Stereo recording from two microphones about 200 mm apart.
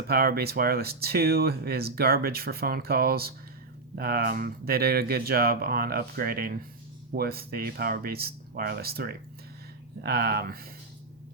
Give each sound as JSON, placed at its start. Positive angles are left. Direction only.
{"t": 0.1, "sound": "speech", "side_deg": -50}